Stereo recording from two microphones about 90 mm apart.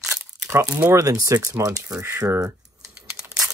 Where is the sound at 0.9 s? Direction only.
40° right (ahead or behind).